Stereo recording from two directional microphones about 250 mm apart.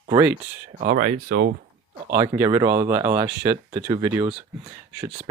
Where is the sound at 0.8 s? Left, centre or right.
Right.